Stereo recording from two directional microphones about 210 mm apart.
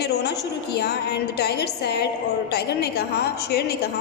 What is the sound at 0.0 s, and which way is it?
A woman's voice, 50° left (ahead or behind).